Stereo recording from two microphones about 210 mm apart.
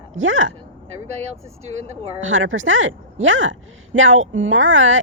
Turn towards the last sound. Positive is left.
turn(degrees=-65)  # may be behind; listen again after turning